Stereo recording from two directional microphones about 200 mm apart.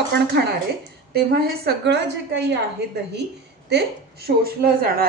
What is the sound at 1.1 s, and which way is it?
A woman's voice, 50° right (ahead or behind).